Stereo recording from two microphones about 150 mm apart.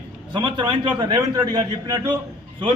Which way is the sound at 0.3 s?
30° right (ahead or behind).